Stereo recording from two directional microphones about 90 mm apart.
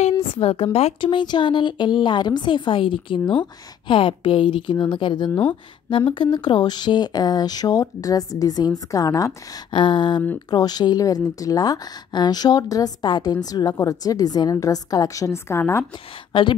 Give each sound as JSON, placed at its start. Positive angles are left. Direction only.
{"t": 0.3, "sound": "speech", "side_deg": 90}
{"t": 5.3, "sound": "speech", "side_deg": 20}
{"t": 5.9, "sound": "speech", "side_deg": 70}
{"t": 9.7, "sound": "speech", "side_deg": 60}
{"t": 13.0, "sound": "speech", "side_deg": 55}
{"t": 16.3, "sound": "a woman's voice", "side_deg": 65}